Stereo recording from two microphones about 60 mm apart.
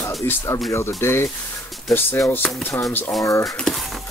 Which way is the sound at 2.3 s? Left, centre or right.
Left.